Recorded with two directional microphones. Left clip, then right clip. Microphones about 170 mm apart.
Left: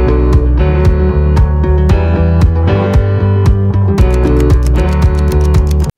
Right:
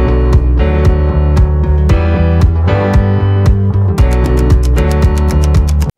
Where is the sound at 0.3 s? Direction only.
Centre (ahead or behind).